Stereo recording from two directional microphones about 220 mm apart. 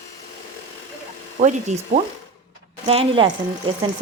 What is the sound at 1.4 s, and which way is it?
Ratchet, 30° right (ahead or behind).